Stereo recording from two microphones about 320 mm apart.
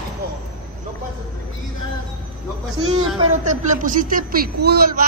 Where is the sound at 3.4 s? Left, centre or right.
Right.